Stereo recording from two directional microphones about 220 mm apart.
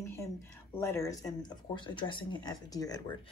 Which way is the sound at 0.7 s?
10° left (ahead or behind).